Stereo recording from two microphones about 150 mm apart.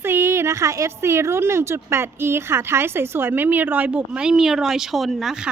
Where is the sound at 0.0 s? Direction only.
15° right (ahead or behind).